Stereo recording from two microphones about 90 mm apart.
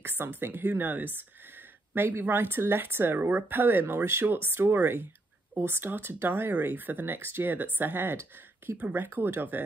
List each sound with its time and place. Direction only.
0.4 s speech: 25° right (ahead or behind)